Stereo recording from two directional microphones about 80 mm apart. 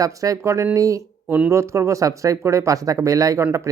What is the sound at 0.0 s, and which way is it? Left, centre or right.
Speech, right.